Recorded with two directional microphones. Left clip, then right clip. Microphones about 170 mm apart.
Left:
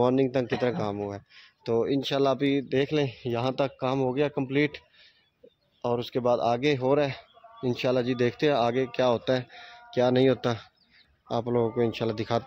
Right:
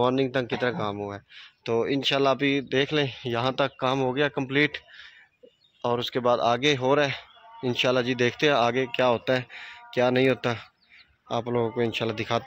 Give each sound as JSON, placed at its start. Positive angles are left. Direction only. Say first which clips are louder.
{"t": 0.0, "sound": "speech", "louder": "even", "side_deg": 20}